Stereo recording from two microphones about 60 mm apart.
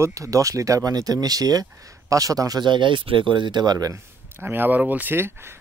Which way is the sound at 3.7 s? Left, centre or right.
Right.